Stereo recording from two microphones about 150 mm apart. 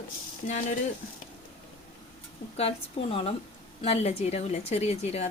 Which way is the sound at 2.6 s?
40° left (ahead or behind).